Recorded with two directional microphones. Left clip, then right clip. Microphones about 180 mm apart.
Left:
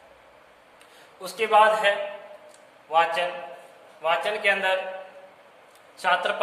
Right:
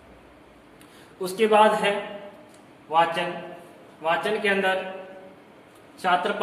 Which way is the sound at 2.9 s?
25° left (ahead or behind).